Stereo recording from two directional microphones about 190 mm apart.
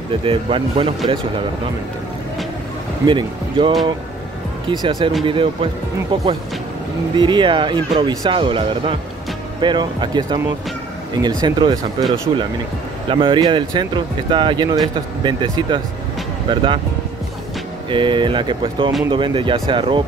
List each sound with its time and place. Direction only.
0.2 s speech: 30° right (ahead or behind)
3.1 s speech: 25° right (ahead or behind)
7.2 s speech: 25° right (ahead or behind)
13.1 s speech: 25° right (ahead or behind)
17.8 s speech: 25° right (ahead or behind)